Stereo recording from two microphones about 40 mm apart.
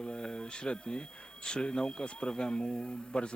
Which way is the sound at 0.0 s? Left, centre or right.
Left.